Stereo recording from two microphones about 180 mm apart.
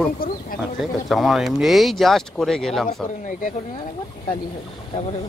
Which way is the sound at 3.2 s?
45° left (ahead or behind).